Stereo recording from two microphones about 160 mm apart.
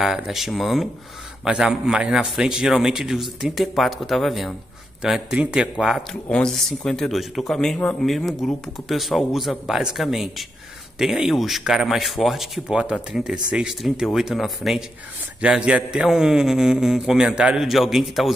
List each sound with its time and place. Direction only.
0.0 s speech: centre (ahead or behind)